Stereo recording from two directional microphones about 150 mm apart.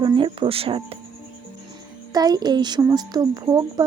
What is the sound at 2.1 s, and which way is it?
Speech, 25° right (ahead or behind).